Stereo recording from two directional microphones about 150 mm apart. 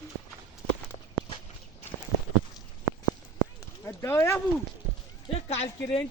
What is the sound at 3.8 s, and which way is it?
Speech, 15° left (ahead or behind).